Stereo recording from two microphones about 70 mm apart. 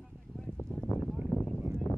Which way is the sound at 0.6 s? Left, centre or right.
Left.